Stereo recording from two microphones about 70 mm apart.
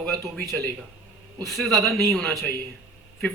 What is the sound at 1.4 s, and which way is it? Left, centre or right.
Speech, centre.